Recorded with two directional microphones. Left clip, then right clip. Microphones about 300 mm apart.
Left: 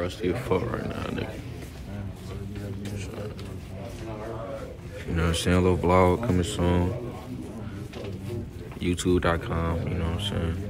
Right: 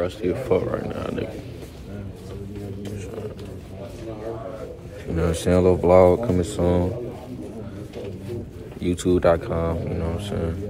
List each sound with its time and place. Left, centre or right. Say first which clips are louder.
0.0 s speech: right 4 dB; centre
5.4 s speech: right 6 dB; centre
8.8 s speech: right 6 dB; centre